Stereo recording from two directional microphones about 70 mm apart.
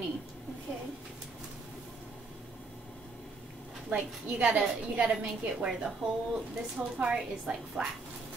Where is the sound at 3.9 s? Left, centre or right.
Centre.